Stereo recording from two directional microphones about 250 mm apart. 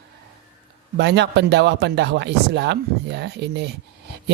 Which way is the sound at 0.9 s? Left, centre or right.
Right.